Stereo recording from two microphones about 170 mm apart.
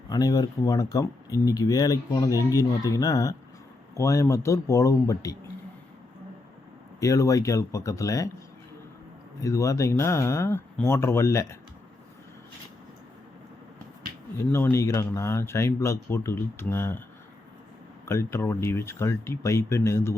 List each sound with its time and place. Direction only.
0.1 s speech: 20° left (ahead or behind)
7.0 s speech: 20° left (ahead or behind)
9.4 s speech: 20° left (ahead or behind)
14.3 s speech: 15° left (ahead or behind)
18.0 s speech: 15° left (ahead or behind)